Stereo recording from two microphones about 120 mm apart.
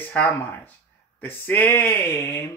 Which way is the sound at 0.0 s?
15° left (ahead or behind).